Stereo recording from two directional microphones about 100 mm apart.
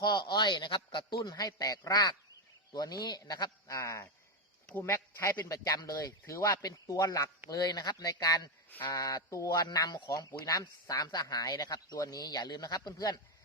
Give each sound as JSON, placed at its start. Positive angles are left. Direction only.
{"t": 0.0, "sound": "a man's voice", "side_deg": 45}
{"t": 1.2, "sound": "speech", "side_deg": 40}
{"t": 3.8, "sound": "speech", "side_deg": 30}